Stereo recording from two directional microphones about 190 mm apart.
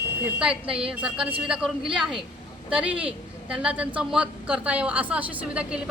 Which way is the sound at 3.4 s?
5° right (ahead or behind).